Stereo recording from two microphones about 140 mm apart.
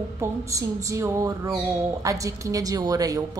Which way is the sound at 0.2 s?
25° right (ahead or behind).